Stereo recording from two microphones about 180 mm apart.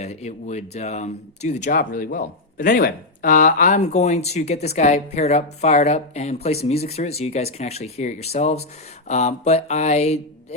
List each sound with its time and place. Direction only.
0.0 s speech: 40° left (ahead or behind)